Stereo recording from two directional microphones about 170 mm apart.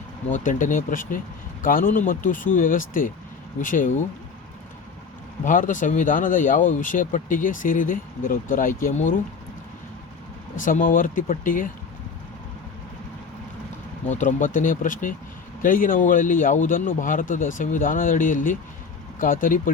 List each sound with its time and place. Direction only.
0.3 s speech: 50° left (ahead or behind)
5.5 s speech: 50° left (ahead or behind)
10.6 s speech: 50° left (ahead or behind)
14.0 s speech: 45° left (ahead or behind)